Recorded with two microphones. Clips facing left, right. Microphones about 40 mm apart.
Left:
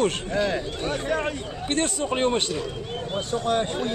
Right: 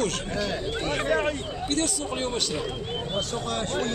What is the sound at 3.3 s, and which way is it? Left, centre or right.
Speech, centre.